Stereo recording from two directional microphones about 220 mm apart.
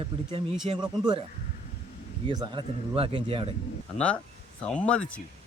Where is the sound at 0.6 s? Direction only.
20° right (ahead or behind).